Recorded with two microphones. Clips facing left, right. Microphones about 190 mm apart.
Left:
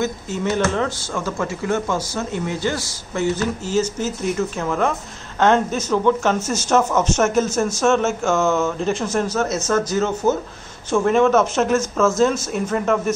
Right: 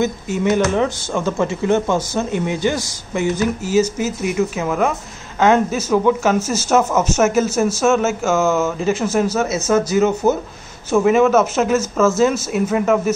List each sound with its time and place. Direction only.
0.0 s speech: 15° right (ahead or behind)